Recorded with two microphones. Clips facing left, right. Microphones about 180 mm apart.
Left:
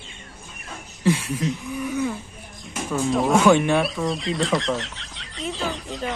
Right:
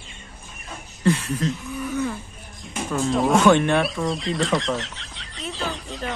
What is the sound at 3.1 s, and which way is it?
Speech, 5° left (ahead or behind).